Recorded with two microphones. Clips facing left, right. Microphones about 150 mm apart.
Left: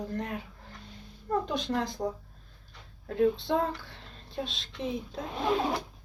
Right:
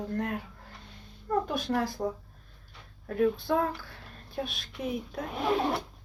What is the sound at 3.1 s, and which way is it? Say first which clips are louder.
Speech: even; 25° left (ahead or behind).